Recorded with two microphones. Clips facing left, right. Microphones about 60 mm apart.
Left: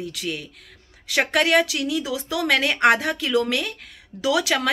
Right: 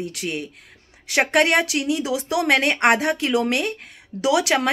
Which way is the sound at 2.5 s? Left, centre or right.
Right.